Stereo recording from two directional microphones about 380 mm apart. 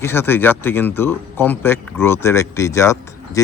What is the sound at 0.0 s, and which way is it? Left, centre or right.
Speech, centre.